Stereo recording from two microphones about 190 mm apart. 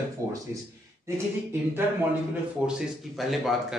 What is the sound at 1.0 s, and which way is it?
Speech, 15° right (ahead or behind).